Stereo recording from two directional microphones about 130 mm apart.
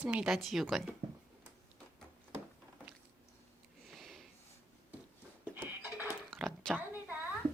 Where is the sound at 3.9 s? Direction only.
Centre (ahead or behind).